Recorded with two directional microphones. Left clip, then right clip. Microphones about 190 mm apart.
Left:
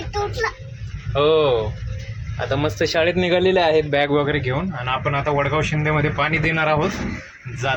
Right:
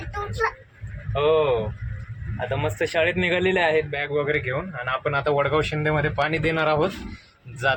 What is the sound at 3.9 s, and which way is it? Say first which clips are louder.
Speech: left 7 dB; 30° left (ahead or behind).